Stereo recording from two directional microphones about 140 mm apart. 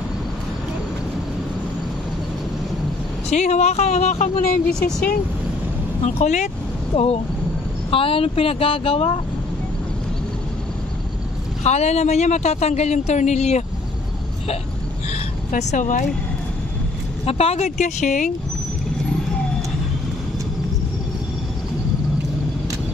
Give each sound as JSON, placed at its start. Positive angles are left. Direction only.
{"t": 3.3, "sound": "speech", "side_deg": 55}
{"t": 4.6, "sound": "speech", "side_deg": 5}
{"t": 6.0, "sound": "speech", "side_deg": 55}
{"t": 11.6, "sound": "speech", "side_deg": 50}
{"t": 15.5, "sound": "speech", "side_deg": 65}
{"t": 17.2, "sound": "speech", "side_deg": 45}